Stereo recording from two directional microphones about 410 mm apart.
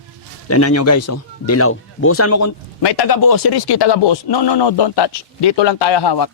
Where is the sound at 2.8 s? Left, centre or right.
Left.